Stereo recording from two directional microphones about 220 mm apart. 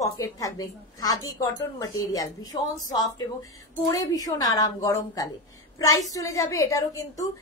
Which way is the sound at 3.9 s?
15° left (ahead or behind).